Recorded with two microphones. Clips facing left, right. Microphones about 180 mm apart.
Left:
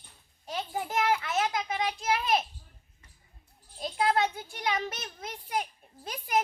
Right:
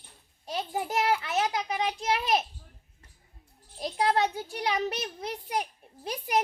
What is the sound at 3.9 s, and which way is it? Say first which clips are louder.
A child's voice: right 1 dB; 35° right (ahead or behind).